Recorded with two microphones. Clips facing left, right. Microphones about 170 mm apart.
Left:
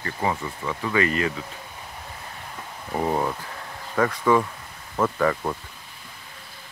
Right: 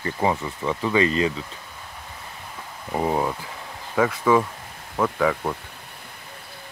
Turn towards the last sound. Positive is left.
turn(degrees=-5)  # may be behind; listen again after turning